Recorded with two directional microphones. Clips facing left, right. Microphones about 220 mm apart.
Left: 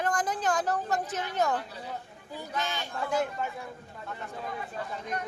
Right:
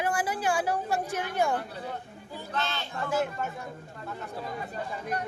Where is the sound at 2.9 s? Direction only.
5° right (ahead or behind).